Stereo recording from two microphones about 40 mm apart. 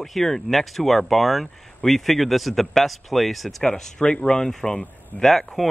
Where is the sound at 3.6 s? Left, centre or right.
Centre.